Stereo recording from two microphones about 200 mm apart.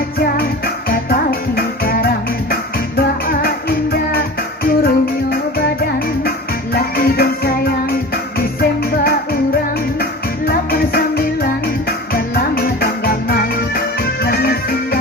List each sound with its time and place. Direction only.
0.3 s music: 50° left (ahead or behind)
3.2 s music: 50° left (ahead or behind)
6.7 s music: 50° left (ahead or behind)